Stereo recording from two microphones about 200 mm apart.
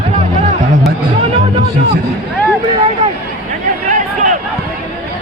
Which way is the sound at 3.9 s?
40° right (ahead or behind).